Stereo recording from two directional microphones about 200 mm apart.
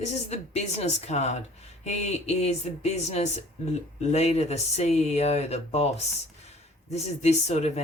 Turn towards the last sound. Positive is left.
turn(degrees=35)  # may be behind; listen again after turning